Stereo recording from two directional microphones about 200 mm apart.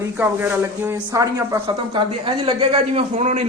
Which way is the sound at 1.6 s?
25° right (ahead or behind).